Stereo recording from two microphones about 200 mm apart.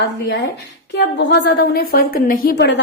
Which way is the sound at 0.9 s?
60° left (ahead or behind).